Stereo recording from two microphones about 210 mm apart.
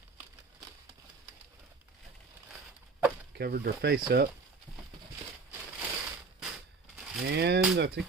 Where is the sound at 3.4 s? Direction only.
45° right (ahead or behind).